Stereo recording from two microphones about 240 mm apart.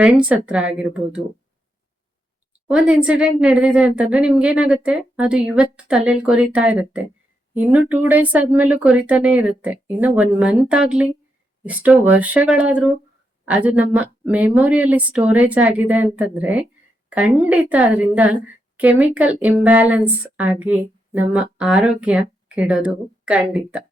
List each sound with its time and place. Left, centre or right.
0.0 s speech: centre
2.6 s speech: centre